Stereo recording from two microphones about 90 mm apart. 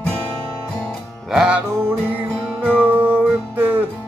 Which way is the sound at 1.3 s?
10° right (ahead or behind).